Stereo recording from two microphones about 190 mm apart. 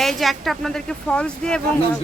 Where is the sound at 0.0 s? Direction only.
Centre (ahead or behind).